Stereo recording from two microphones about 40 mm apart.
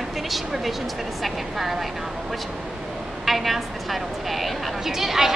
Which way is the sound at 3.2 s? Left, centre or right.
Centre.